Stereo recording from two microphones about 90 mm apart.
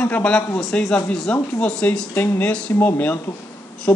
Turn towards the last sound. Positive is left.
turn(degrees=25)  # may be behind; listen again after turning